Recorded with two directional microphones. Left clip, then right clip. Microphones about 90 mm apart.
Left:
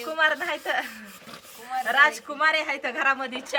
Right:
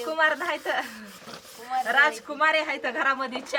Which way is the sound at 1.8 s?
20° left (ahead or behind).